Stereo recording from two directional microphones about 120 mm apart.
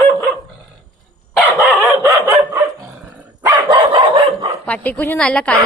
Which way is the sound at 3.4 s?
35° right (ahead or behind).